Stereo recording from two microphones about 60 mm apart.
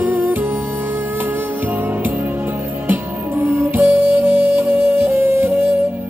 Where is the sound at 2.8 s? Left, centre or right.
Right.